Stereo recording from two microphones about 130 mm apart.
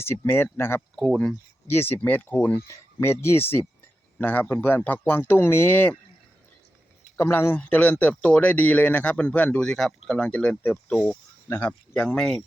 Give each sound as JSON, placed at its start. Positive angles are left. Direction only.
{"t": 0.0, "sound": "speech", "side_deg": 20}
{"t": 0.9, "sound": "speech", "side_deg": 0}
{"t": 1.6, "sound": "speech", "side_deg": 15}
{"t": 7.2, "sound": "speech", "side_deg": 15}